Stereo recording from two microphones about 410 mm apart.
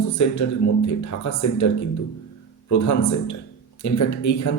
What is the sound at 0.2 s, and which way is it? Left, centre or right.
A man's voice, left.